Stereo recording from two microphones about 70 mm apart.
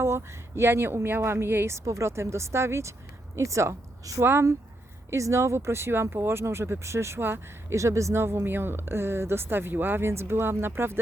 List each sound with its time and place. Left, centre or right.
0.0 s a woman's voice: right
4.2 s speech: right
7.8 s speech: right